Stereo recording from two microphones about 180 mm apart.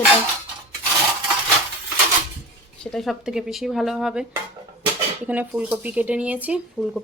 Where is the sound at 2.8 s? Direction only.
5° left (ahead or behind).